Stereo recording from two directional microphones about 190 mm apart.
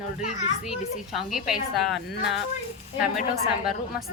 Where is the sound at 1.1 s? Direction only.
Centre (ahead or behind).